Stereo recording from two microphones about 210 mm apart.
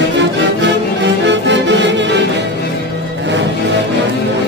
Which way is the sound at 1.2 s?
55° right (ahead or behind).